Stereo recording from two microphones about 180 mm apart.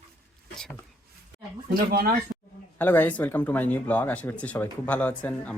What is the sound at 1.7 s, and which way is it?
Speech, 55° right (ahead or behind).